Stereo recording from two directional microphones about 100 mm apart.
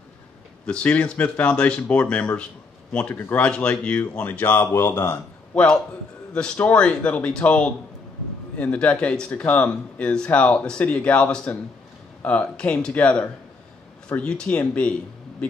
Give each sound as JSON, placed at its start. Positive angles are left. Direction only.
{"t": 0.7, "sound": "a man's voice", "side_deg": 10}
{"t": 5.5, "sound": "speech", "side_deg": 10}